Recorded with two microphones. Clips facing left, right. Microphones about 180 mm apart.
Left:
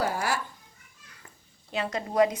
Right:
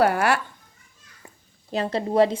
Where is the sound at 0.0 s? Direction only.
65° right (ahead or behind).